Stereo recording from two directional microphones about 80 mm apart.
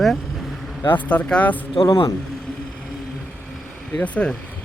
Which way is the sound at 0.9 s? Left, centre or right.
Centre.